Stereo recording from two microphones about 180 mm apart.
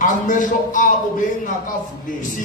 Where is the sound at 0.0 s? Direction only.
45° left (ahead or behind).